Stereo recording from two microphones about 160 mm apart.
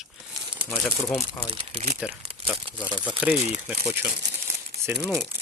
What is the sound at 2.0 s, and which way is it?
Speech, 5° right (ahead or behind).